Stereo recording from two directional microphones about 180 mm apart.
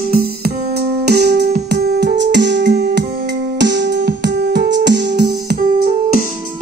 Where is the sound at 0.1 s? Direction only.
55° right (ahead or behind).